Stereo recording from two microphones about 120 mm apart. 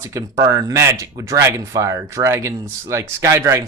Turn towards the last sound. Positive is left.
turn(degrees=-25)  # may be behind; listen again after turning